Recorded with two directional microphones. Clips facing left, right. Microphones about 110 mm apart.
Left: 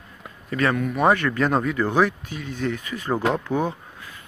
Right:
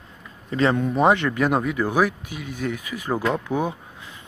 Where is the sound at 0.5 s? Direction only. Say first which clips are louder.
Right 2 dB; 25° right (ahead or behind); by 3.3 s 10° right (ahead or behind).